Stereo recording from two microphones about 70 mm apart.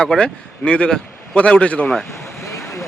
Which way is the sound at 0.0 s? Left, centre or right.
Centre.